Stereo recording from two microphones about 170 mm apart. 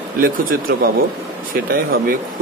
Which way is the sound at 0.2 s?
60° right (ahead or behind).